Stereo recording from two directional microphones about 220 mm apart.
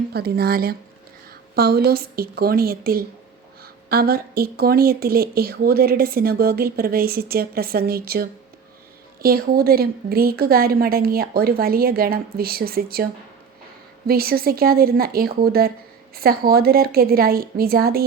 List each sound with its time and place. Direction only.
0.1 s speech: 45° right (ahead or behind)
14.1 s speech: 45° right (ahead or behind)